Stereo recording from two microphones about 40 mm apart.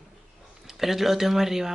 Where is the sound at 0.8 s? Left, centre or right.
Centre.